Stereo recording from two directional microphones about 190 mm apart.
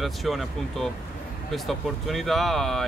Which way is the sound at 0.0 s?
Centre (ahead or behind).